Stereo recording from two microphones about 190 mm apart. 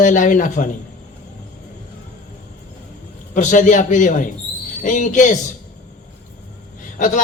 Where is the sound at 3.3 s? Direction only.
40° left (ahead or behind).